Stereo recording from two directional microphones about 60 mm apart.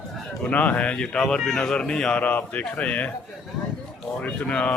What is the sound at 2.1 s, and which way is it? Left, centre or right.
Speech, left.